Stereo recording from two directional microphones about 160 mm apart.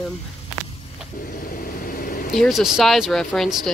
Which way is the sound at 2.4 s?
Centre (ahead or behind).